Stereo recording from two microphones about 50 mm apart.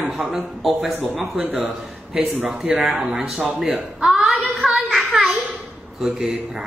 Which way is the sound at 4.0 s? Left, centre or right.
Centre.